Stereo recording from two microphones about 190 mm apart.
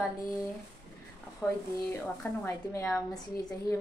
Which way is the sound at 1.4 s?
15° left (ahead or behind).